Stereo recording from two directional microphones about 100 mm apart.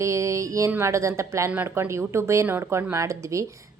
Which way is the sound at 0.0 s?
30° right (ahead or behind).